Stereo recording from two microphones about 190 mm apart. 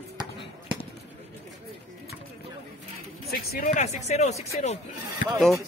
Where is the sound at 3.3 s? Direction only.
55° left (ahead or behind).